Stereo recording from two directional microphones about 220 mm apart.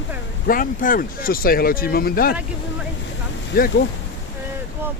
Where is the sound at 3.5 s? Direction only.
45° left (ahead or behind).